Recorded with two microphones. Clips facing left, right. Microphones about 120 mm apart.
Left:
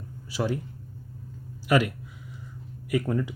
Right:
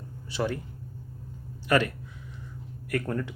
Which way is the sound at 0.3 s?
5° left (ahead or behind).